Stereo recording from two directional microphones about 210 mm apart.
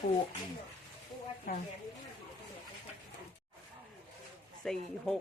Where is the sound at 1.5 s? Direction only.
45° left (ahead or behind).